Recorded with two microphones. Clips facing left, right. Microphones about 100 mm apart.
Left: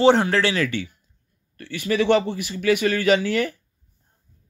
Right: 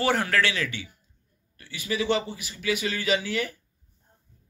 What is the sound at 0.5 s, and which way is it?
A man's voice, 50° left (ahead or behind).